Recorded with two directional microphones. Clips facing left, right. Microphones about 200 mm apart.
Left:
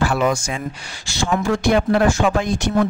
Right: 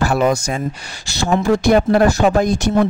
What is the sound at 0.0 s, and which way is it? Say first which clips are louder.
Speech: right 3 dB; 40° right (ahead or behind).